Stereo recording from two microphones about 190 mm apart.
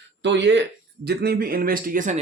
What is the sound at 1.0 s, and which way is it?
Speech, 55° right (ahead or behind).